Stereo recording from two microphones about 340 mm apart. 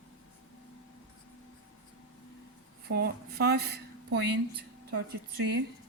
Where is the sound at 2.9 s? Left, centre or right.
Right.